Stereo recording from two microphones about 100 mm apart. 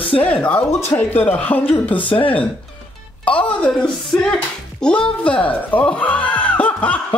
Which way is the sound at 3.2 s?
15° left (ahead or behind).